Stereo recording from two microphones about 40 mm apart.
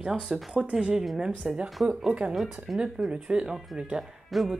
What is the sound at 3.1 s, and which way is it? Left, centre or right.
Speech, right.